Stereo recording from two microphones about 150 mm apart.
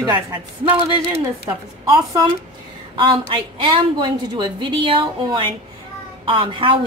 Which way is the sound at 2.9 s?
35° right (ahead or behind).